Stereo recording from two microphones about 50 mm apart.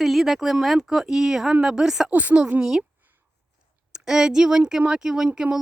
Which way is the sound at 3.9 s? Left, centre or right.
Centre.